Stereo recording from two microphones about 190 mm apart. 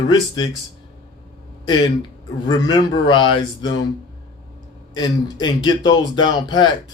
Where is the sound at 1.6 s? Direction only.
20° left (ahead or behind).